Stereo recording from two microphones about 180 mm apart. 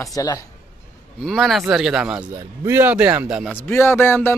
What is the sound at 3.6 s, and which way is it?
Speech, 10° left (ahead or behind).